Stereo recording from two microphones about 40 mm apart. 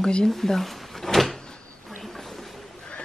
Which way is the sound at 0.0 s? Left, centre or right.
Centre.